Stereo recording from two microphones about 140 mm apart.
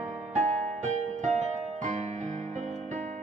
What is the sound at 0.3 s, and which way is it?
Music, 60° right (ahead or behind).